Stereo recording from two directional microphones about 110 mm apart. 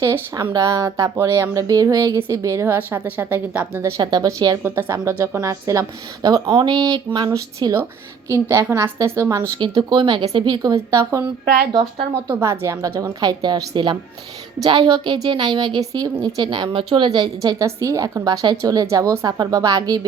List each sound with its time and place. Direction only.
0.0 s a woman's voice: 30° right (ahead or behind); by 3.8 s 15° right (ahead or behind)
3.8 s a woman's voice: 25° right (ahead or behind)
4.0 s speech: 40° right (ahead or behind)
4.6 s a woman's voice: 20° right (ahead or behind); by 7.3 s 40° right (ahead or behind)
7.3 s a woman's voice: 30° right (ahead or behind)
9.6 s a woman's voice: 45° right (ahead or behind)
10.9 s speech: 30° right (ahead or behind)
12.3 s a woman's voice: 25° right (ahead or behind)